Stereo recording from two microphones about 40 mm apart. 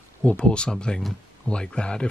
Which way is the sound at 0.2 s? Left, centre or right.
Left.